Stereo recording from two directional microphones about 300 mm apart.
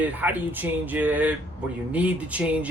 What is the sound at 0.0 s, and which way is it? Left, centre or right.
Speech, centre.